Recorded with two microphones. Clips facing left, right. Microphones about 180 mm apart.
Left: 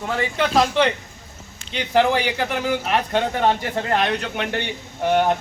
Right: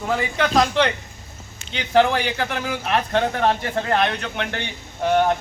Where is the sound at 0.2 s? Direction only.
Centre (ahead or behind).